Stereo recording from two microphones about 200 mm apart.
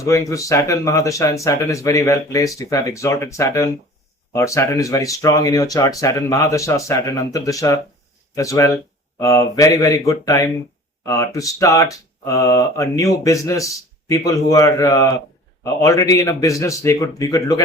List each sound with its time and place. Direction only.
0.0 s speech: 15° left (ahead or behind)